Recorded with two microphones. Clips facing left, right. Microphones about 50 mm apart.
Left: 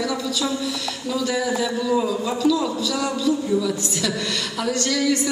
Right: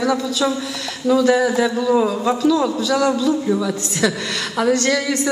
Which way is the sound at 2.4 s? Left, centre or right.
Right.